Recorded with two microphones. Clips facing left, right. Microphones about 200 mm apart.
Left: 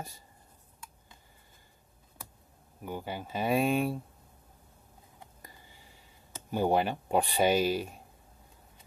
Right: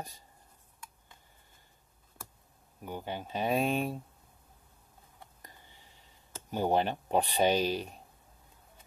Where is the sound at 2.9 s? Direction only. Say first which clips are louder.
Left 1 dB; 10° left (ahead or behind).